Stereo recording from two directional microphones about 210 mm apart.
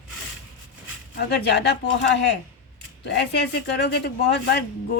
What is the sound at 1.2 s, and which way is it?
A woman's voice, 50° left (ahead or behind).